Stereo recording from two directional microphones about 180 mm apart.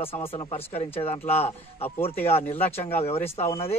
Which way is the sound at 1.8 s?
10° left (ahead or behind).